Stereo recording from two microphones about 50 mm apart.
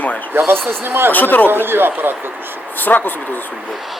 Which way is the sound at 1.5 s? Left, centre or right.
Right.